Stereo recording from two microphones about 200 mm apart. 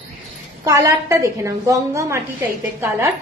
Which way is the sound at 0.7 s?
15° right (ahead or behind).